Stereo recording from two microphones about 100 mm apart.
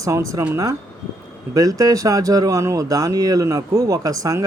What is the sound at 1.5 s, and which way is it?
Speech, 35° right (ahead or behind).